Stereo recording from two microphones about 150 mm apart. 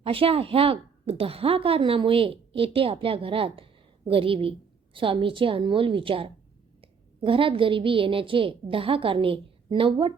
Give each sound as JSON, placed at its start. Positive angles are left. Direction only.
{"t": 0.0, "sound": "a woman's voice", "side_deg": -40}